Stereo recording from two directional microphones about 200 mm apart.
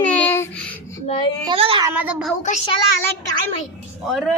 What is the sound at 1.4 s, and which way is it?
Speech, 25° right (ahead or behind).